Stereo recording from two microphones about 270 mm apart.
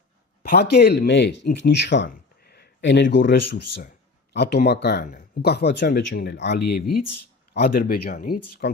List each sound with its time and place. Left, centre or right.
0.4 s speech: left